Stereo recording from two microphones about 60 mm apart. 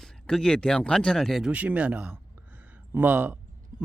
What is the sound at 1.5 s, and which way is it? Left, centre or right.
Speech, right.